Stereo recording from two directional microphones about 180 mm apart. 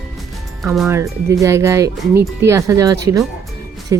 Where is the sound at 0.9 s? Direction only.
15° right (ahead or behind).